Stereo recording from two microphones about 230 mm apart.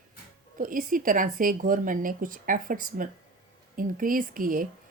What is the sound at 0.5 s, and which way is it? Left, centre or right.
A woman's voice, right.